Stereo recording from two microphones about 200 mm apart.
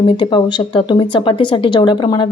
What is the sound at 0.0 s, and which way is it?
Speech, 25° left (ahead or behind).